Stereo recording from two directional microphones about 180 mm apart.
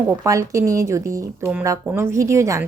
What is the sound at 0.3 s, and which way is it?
A woman's voice, 20° right (ahead or behind).